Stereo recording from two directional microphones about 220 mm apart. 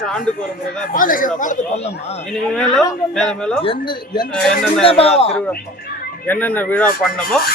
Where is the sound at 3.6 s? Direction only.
20° left (ahead or behind).